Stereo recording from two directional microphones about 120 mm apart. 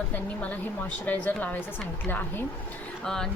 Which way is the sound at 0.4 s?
15° left (ahead or behind).